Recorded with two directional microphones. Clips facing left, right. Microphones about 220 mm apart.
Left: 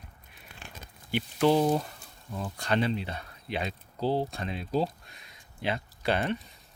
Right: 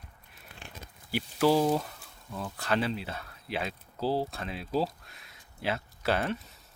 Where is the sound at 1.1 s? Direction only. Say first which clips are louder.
Left 1 dB; 5° right (ahead or behind).